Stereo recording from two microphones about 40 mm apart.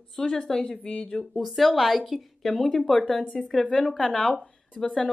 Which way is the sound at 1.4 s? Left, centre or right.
Centre.